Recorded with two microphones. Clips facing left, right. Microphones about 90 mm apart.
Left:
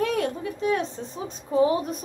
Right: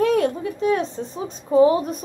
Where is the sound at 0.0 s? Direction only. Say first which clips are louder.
Right 6 dB; 35° right (ahead or behind).